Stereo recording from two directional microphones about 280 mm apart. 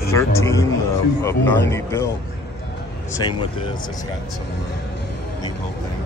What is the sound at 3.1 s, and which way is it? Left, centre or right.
Speech, centre.